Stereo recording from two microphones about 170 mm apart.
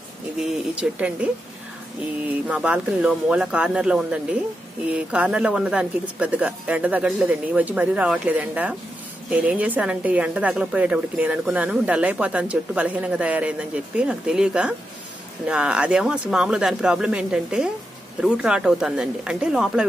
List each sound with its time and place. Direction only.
0.4 s a woman's voice: 5° right (ahead or behind)